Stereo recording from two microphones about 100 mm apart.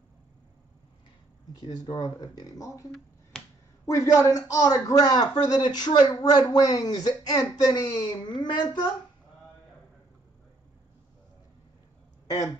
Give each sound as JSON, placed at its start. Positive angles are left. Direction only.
{"t": 1.9, "sound": "speech", "side_deg": 35}
{"t": 3.3, "sound": "finger snapping", "side_deg": 10}
{"t": 3.8, "sound": "speech", "side_deg": 30}